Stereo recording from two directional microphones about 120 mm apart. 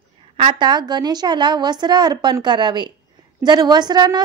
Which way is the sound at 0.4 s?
40° right (ahead or behind).